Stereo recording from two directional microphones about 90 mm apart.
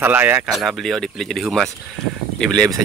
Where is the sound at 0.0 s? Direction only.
20° right (ahead or behind).